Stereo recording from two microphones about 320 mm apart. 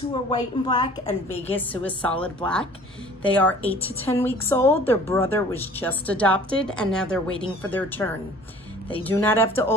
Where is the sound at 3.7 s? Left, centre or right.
Centre.